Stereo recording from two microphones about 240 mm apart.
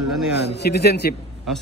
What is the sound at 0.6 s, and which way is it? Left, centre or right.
Speech, left.